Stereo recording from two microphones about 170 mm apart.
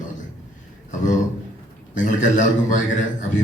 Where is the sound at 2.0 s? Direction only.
45° left (ahead or behind).